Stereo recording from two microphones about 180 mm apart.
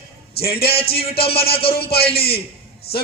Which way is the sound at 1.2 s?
30° left (ahead or behind).